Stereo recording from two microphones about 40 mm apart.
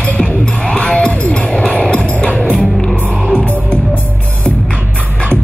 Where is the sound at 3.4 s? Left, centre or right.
Left.